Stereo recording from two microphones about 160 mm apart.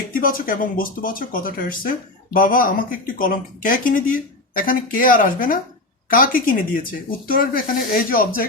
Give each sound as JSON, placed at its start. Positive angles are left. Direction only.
{"t": 0.1, "sound": "speech", "side_deg": 60}